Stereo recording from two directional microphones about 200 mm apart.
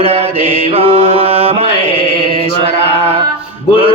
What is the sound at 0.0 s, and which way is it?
Mantra, 30° right (ahead or behind).